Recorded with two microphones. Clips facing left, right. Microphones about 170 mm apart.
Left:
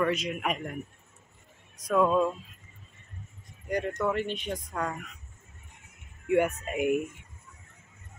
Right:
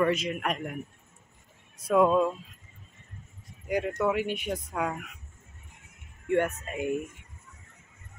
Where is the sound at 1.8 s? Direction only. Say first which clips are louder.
Right 2 dB; 10° right (ahead or behind).